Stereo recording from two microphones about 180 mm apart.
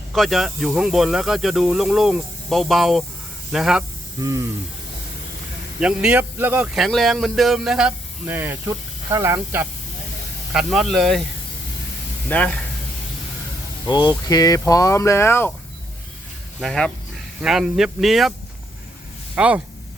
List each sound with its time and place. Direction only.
0.1 s speech: centre (ahead or behind)
4.2 s speech: 15° right (ahead or behind)
5.8 s speech: 5° right (ahead or behind)
10.5 s speech: centre (ahead or behind)
12.3 s speech: 5° left (ahead or behind)
13.8 s speech: 25° left (ahead or behind)
16.6 s speech: 5° left (ahead or behind)
19.4 s speech: 5° right (ahead or behind)